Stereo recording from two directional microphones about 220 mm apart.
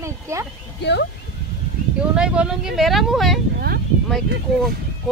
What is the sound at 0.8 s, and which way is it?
Speech, 50° left (ahead or behind).